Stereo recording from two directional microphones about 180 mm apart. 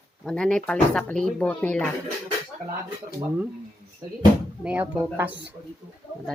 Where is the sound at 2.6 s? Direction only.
50° right (ahead or behind).